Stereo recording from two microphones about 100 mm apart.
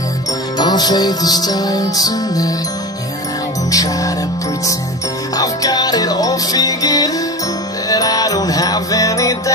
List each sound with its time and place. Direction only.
0.6 s music: 45° left (ahead or behind)
3.7 s music: 35° left (ahead or behind)
5.4 s music: 40° left (ahead or behind)